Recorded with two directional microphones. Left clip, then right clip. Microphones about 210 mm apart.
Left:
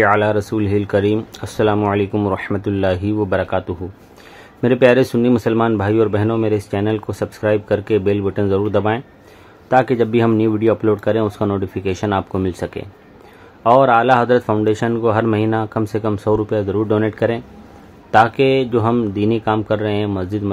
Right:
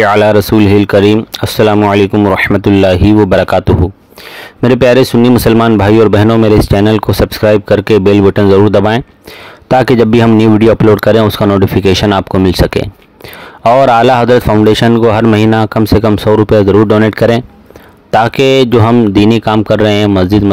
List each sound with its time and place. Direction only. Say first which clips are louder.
0.0 s speech: right 8 dB; 45° right (ahead or behind)